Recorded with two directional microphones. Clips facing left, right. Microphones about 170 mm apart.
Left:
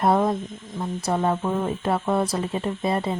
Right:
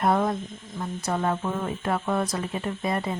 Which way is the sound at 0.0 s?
25° left (ahead or behind).